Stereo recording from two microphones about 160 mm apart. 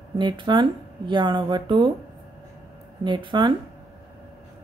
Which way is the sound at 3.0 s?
30° right (ahead or behind).